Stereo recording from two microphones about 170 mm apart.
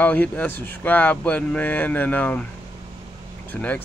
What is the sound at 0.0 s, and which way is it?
Speech, 10° left (ahead or behind).